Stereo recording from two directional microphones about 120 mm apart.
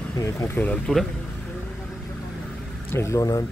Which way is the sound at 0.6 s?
10° left (ahead or behind).